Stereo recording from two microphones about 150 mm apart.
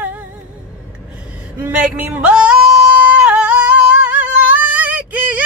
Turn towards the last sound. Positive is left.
turn(degrees=-10)  # may be behind; listen again after turning